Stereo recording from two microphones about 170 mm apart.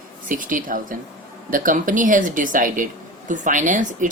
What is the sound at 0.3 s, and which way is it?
Speech, 50° right (ahead or behind).